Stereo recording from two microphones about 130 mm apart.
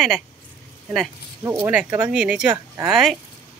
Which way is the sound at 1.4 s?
20° right (ahead or behind).